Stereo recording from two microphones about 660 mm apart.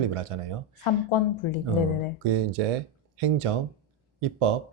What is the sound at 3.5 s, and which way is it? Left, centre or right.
Speech, right.